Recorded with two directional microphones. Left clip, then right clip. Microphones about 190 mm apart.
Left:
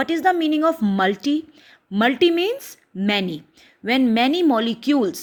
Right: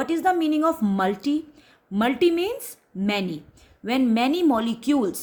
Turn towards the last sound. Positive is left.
turn(degrees=20)  # may be behind; listen again after turning